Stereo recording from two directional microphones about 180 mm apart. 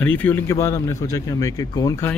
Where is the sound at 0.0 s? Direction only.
10° left (ahead or behind).